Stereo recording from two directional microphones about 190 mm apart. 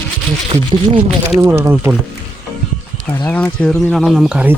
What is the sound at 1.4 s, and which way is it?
Speech, 15° right (ahead or behind).